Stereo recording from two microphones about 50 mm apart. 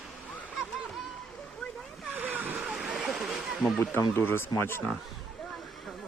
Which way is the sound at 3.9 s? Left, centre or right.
Left.